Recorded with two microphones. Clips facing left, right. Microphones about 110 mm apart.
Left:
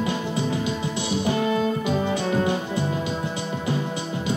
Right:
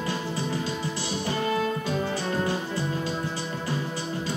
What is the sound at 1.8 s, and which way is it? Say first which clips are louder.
Music: left 4 dB; 20° left (ahead or behind).